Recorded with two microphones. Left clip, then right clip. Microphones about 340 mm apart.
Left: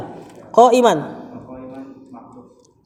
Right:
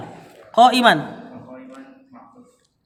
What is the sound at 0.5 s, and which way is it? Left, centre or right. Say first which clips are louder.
Speech: left 1 dB; centre.